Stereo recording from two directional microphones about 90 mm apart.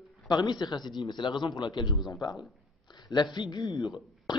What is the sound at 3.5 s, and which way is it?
Speech, 55° left (ahead or behind).